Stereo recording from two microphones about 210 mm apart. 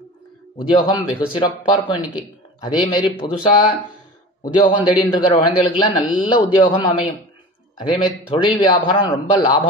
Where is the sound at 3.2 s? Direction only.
20° left (ahead or behind).